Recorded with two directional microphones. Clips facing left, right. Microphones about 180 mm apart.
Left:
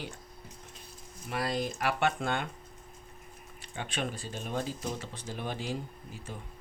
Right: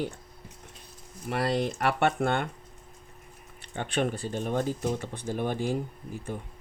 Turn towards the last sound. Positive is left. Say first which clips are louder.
# right 7 dB
turn(degrees=-55)  # may be behind; listen again after turning